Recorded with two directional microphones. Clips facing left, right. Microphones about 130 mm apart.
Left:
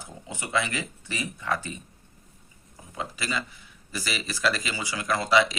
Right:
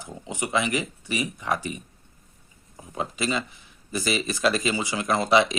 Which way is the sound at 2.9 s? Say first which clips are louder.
Right 5 dB; 25° right (ahead or behind).